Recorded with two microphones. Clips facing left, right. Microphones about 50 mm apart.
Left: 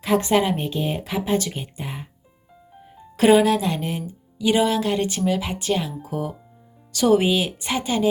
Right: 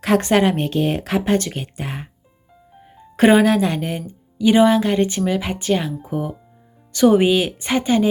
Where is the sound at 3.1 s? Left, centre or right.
Right.